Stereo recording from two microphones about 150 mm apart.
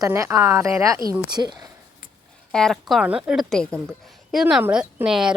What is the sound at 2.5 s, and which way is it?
A woman's voice, 5° left (ahead or behind).